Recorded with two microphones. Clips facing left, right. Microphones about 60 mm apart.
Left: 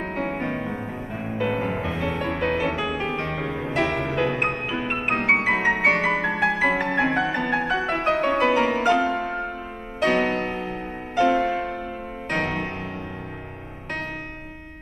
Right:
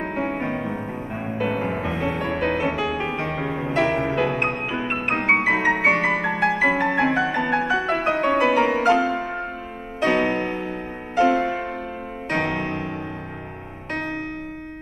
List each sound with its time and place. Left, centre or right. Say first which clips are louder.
0.0 s music: right 2 dB; centre
0.5 s music: right 2 dB; right
2.0 s music: right 1 dB; centre